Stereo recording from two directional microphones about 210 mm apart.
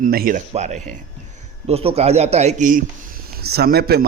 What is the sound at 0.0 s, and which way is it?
A man's voice, 45° right (ahead or behind).